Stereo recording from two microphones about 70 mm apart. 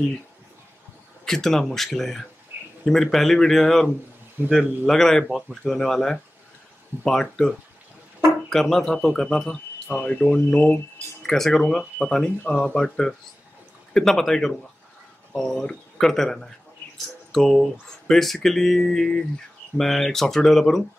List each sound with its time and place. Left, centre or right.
1.2 s speech: centre
4.4 s speech: right
4.8 s speech: centre